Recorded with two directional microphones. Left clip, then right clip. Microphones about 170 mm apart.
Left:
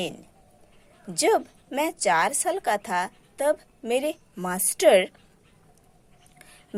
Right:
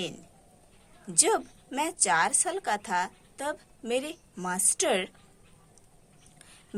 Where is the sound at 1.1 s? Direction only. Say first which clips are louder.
Left 4 dB; 20° left (ahead or behind).